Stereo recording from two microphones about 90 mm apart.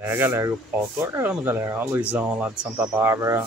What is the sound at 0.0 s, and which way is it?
Speech, 25° right (ahead or behind).